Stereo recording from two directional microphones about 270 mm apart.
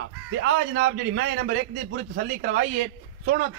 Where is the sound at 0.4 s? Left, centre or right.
Right.